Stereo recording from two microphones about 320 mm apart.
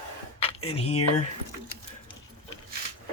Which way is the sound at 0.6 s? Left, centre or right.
Centre.